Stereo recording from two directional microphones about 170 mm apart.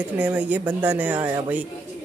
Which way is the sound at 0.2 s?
10° right (ahead or behind).